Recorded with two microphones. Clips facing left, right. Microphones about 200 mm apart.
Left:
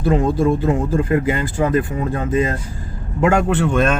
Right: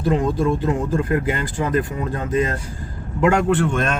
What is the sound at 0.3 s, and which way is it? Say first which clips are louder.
Speech: left 3 dB; 25° left (ahead or behind).